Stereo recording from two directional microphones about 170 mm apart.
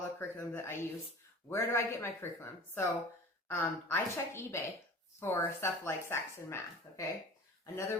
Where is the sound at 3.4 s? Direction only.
15° left (ahead or behind).